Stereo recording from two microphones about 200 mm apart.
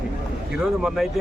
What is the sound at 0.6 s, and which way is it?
Speech, centre (ahead or behind).